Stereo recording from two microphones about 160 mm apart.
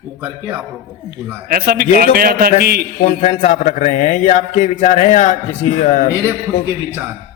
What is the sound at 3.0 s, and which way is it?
A man's voice, 50° left (ahead or behind).